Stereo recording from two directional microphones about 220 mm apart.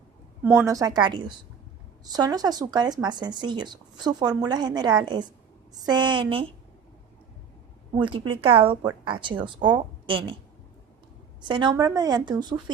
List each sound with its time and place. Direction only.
0.4 s a woman's voice: 10° right (ahead or behind)
7.9 s speech: 20° right (ahead or behind)
11.4 s speech: 20° right (ahead or behind)